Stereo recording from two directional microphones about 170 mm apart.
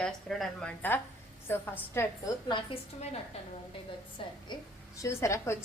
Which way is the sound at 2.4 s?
30° left (ahead or behind).